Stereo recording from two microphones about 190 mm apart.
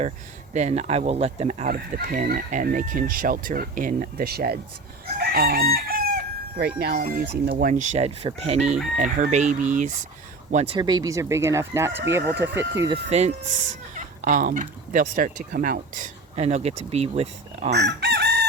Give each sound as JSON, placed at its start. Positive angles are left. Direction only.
{"t": 0.5, "sound": "chicken", "side_deg": -35}
{"t": 1.6, "sound": "speech", "side_deg": -45}
{"t": 5.1, "sound": "chicken", "side_deg": -55}
{"t": 10.8, "sound": "speech", "side_deg": -20}
{"t": 12.9, "sound": "chicken", "side_deg": -35}
{"t": 13.9, "sound": "speech", "side_deg": -45}
{"t": 17.7, "sound": "chicken", "side_deg": -60}